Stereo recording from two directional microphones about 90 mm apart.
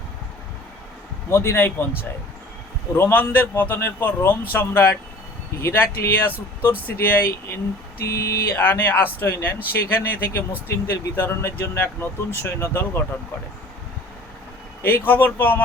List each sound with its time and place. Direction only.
1.3 s speech: 30° left (ahead or behind)
2.9 s speech: 25° left (ahead or behind)
14.8 s speech: 25° left (ahead or behind)